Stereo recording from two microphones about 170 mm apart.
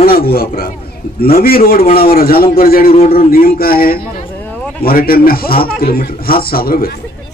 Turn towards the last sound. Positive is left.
turn(degrees=60)  # may be behind; listen again after turning